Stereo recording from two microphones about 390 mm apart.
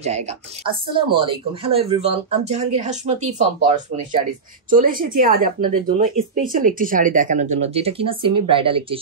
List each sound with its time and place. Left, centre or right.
0.7 s speech: centre